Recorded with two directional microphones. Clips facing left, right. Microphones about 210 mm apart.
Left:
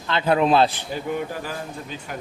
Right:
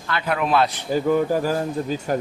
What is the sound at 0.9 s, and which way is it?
Speech, 40° right (ahead or behind).